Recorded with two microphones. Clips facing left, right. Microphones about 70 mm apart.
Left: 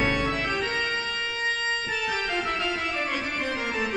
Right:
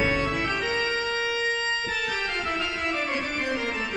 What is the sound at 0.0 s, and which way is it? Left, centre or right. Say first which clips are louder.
Organ: even; centre.